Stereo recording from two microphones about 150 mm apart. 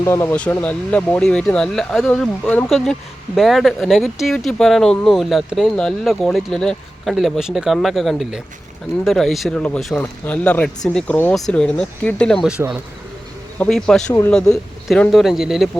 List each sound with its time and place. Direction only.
0.0 s speech: 20° left (ahead or behind)
0.3 s speech: 10° left (ahead or behind); by 12.8 s 10° right (ahead or behind)
13.6 s speech: 5° left (ahead or behind)